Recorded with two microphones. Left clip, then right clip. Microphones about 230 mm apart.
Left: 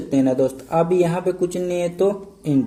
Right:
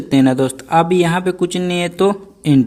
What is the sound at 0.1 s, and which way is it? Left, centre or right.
Speech, right.